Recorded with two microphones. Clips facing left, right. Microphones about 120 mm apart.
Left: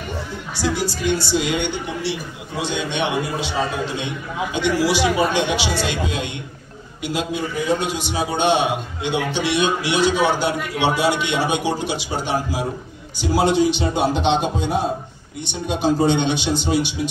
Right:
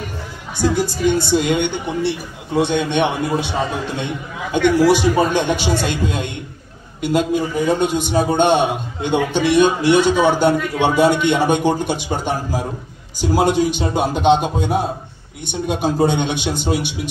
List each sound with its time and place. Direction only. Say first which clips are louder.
0.6 s a man's voice: right 5 dB; 50° right (ahead or behind)
15.4 s a man's voice: right 1 dB; 55° right (ahead or behind)